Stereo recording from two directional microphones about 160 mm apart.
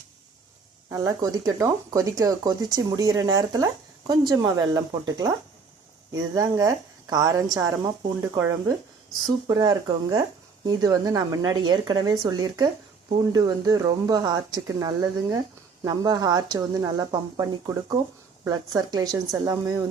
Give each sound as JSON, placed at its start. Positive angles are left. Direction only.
{"t": 0.9, "sound": "speech", "side_deg": -20}